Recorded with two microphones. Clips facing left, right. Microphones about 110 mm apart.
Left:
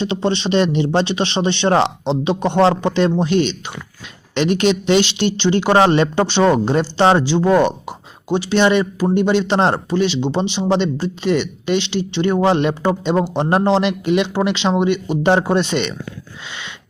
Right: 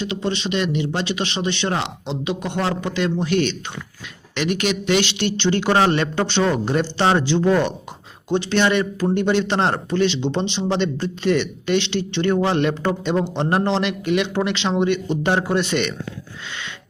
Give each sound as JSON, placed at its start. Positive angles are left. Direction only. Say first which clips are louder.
{"t": 0.0, "sound": "speech", "louder": "left 5 dB", "side_deg": 30}
{"t": 7.2, "sound": "speech", "louder": "left 4 dB", "side_deg": 15}